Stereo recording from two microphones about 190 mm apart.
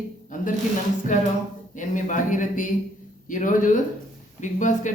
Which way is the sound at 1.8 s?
40° left (ahead or behind).